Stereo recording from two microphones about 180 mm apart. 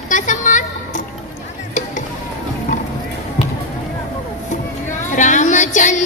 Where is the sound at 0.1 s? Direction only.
45° left (ahead or behind).